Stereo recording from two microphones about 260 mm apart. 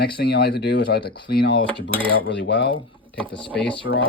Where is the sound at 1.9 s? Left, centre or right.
Centre.